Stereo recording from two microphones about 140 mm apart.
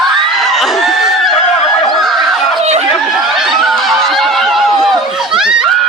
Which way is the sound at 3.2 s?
Centre (ahead or behind).